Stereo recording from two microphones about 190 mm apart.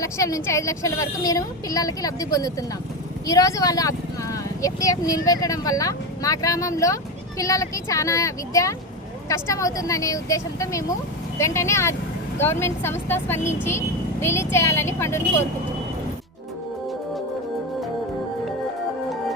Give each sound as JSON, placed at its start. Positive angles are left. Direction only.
{"t": 0.0, "sound": "speech", "side_deg": 15}